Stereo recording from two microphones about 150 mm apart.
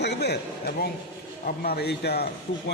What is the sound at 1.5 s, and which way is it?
Speech, 80° left.